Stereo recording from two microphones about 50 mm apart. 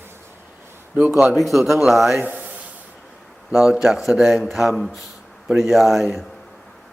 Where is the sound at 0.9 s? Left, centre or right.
Right.